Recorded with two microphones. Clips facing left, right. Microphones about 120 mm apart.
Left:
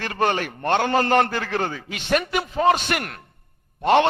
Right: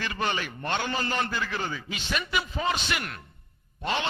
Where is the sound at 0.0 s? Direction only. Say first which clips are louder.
Left 7 dB; 55° left (ahead or behind).